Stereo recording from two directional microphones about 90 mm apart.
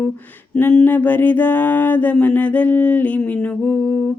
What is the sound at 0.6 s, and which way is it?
Mantra, 20° left (ahead or behind).